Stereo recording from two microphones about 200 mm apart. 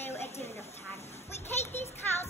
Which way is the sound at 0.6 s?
30° left (ahead or behind).